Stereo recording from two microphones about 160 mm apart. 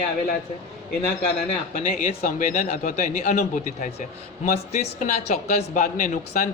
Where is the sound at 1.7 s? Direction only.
60° left (ahead or behind).